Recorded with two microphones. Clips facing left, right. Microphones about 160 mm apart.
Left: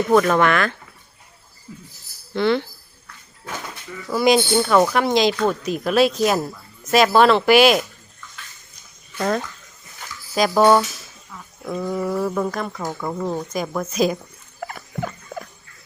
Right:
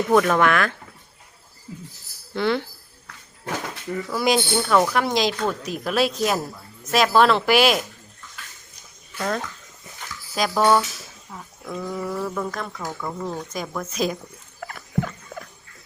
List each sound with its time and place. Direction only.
0.1 s speech: centre (ahead or behind)
1.7 s music: 30° right (ahead or behind)
2.3 s speech: 5° right (ahead or behind)
4.1 s speech: centre (ahead or behind)
9.1 s speech: 5° left (ahead or behind)
10.5 s speech: 20° left (ahead or behind); by 12.7 s 5° left (ahead or behind)
12.7 s speech: 20° left (ahead or behind)
13.5 s speech: 5° left (ahead or behind)
14.6 s a sound: 10° left (ahead or behind)